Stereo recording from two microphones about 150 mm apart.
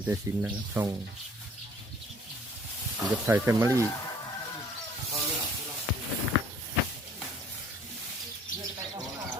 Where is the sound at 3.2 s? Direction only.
15° right (ahead or behind).